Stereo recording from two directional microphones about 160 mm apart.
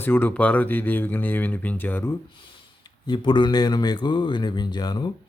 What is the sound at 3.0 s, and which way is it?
Speech, 30° left (ahead or behind).